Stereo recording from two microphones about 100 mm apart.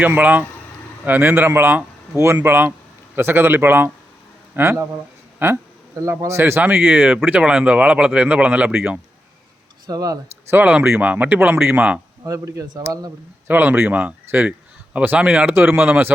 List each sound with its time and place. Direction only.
0.0 s speech: 15° right (ahead or behind)
9.8 s speech: 40° right (ahead or behind)
10.5 s speech: 15° right (ahead or behind)
12.2 s speech: 35° right (ahead or behind)
13.5 s speech: 20° right (ahead or behind)